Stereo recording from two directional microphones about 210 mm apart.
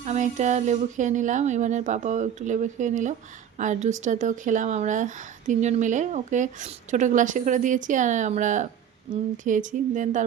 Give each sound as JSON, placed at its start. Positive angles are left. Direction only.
{"t": 0.0, "sound": "speech", "side_deg": -35}